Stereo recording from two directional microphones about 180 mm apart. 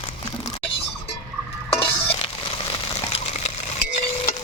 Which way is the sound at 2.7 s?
35° left (ahead or behind).